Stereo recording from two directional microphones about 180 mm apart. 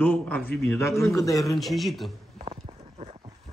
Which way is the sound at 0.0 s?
5° left (ahead or behind).